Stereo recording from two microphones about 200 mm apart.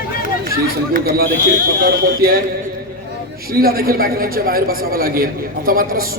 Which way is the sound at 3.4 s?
50° right (ahead or behind).